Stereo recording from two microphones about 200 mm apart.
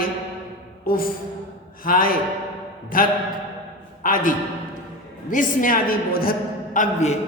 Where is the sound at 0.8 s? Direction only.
45° left (ahead or behind).